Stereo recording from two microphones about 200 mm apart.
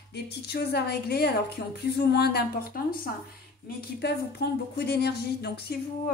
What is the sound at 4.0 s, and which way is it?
A woman's voice, 55° left (ahead or behind).